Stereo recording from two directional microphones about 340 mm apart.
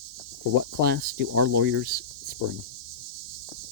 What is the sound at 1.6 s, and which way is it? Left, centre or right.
Speech, right.